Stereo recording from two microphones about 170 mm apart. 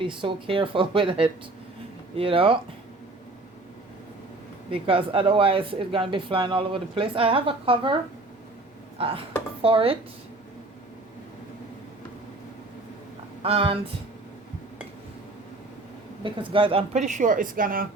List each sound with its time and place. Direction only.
0.0 s speech: 30° right (ahead or behind)
4.7 s speech: 30° right (ahead or behind)
9.0 s speech: 30° right (ahead or behind)
13.4 s speech: 35° right (ahead or behind)
16.2 s speech: 30° right (ahead or behind); by 17.8 s 55° right (ahead or behind)